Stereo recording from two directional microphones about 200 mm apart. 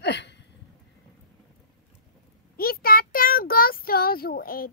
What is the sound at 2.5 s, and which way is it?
Speech, 50° left (ahead or behind).